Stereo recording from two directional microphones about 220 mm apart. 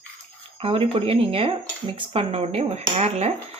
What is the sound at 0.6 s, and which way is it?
Speech, 25° right (ahead or behind).